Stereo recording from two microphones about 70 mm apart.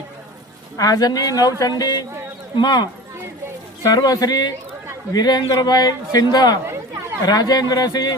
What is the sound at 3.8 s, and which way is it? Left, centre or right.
A man's voice, left.